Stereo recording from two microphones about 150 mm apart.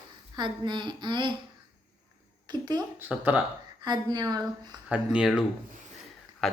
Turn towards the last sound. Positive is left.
turn(degrees=5)  # may be behind; listen again after turning